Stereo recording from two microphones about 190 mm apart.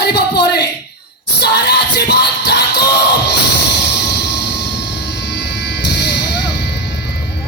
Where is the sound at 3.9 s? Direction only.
60° left (ahead or behind).